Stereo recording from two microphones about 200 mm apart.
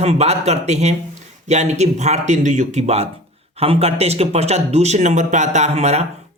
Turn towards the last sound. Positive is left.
turn(degrees=-35)  # may be behind; listen again after turning